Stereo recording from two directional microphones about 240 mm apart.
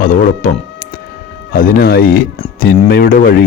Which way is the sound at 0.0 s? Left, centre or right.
Left.